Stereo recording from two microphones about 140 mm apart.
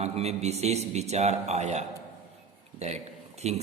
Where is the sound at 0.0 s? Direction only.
50° right (ahead or behind).